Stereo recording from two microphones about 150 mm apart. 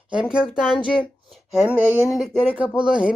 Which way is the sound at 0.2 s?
5° right (ahead or behind).